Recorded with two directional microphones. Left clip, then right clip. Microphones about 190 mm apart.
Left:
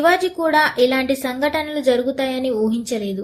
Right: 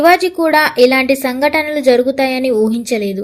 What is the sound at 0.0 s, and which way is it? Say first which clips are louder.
A woman's voice: right 6 dB; 30° right (ahead or behind).